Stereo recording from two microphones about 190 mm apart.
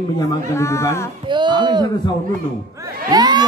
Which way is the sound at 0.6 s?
15° left (ahead or behind).